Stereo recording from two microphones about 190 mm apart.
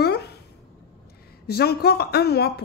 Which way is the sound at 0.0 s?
60° left (ahead or behind).